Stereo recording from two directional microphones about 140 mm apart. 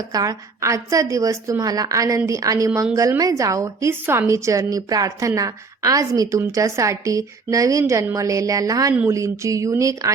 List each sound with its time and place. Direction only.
0.1 s a woman's voice: 25° right (ahead or behind)